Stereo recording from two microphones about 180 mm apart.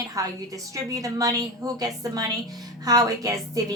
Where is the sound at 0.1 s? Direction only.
20° right (ahead or behind).